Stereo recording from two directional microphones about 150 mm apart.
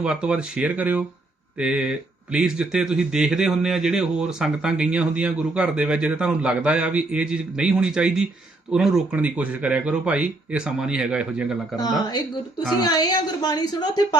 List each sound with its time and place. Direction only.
0.0 s speech: 5° right (ahead or behind)
11.8 s a woman's voice: 30° left (ahead or behind)